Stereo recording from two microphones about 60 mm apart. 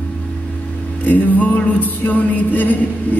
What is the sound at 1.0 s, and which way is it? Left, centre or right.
Music, left.